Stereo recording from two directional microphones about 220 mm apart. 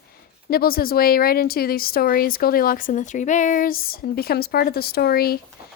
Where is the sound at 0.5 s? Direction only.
45° left (ahead or behind).